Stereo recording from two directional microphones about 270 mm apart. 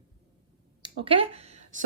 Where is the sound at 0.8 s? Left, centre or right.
Centre.